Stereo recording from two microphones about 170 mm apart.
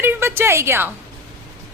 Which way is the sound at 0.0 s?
15° right (ahead or behind).